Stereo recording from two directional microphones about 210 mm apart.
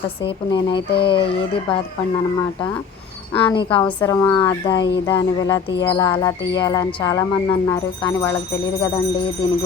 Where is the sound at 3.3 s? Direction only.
10° left (ahead or behind).